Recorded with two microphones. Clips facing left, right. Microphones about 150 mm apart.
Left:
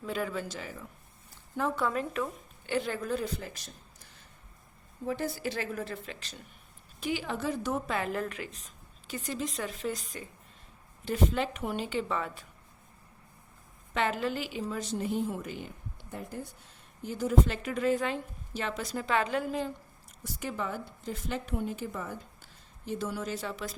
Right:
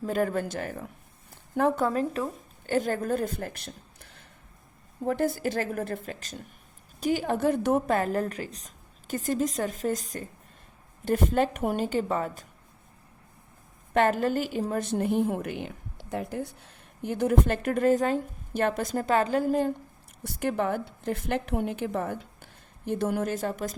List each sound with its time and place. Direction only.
0.0 s a woman's voice: 45° right (ahead or behind)
1.8 s a woman's voice: 35° right (ahead or behind)
13.9 s a woman's voice: 50° right (ahead or behind); by 16.5 s 75° right (ahead or behind)
17.0 s a woman's voice: 60° right (ahead or behind)
20.2 s a woman's voice: 60° right (ahead or behind)